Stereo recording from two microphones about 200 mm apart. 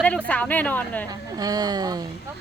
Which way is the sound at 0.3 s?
5° left (ahead or behind).